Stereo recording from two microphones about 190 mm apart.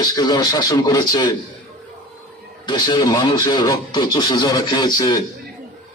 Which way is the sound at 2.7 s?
20° left (ahead or behind).